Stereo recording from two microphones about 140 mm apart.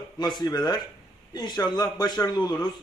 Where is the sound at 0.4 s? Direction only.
30° left (ahead or behind).